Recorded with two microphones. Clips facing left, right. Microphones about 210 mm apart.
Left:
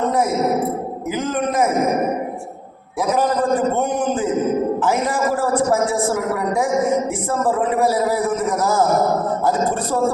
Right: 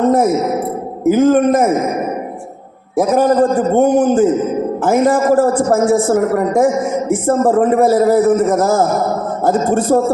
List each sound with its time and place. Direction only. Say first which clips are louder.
1.0 s a man's voice: right 13 dB; 45° right (ahead or behind)
3.0 s a man's voice: right 7 dB; 45° right (ahead or behind)